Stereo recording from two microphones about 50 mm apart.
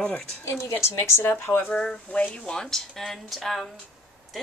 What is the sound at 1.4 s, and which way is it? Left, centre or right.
Speech, left.